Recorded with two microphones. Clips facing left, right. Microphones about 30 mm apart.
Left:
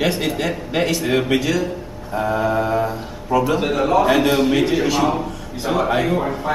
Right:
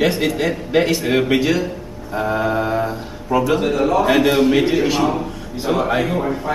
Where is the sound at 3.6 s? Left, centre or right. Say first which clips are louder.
Even; centre.